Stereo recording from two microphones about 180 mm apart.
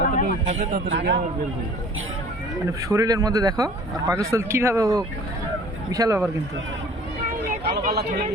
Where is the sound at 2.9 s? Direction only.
20° right (ahead or behind).